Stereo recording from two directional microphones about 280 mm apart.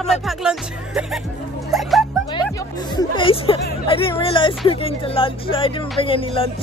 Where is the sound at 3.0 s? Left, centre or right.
Centre.